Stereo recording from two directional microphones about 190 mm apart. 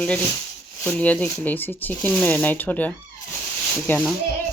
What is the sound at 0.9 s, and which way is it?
Speech, 5° left (ahead or behind).